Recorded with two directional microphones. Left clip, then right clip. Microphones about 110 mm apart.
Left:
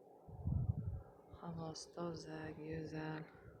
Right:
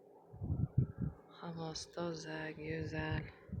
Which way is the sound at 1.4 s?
20° right (ahead or behind).